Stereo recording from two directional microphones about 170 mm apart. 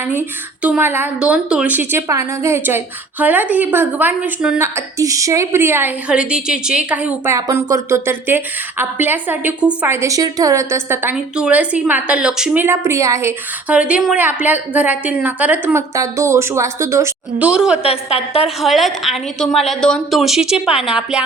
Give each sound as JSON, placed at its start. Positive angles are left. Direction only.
{"t": 0.1, "sound": "a woman's voice", "side_deg": -10}
{"t": 7.3, "sound": "a woman's voice", "side_deg": -20}
{"t": 17.5, "sound": "a woman's voice", "side_deg": -5}
{"t": 17.8, "sound": "a woman's voice", "side_deg": 35}
{"t": 18.6, "sound": "a woman's voice", "side_deg": 0}